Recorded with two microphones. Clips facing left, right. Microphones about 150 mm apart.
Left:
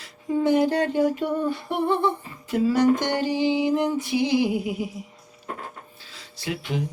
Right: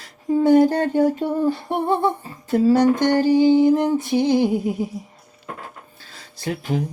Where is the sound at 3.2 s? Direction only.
45° right (ahead or behind).